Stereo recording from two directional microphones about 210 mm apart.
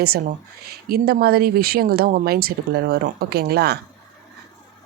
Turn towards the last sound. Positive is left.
turn(degrees=-50)  # may be behind; listen again after turning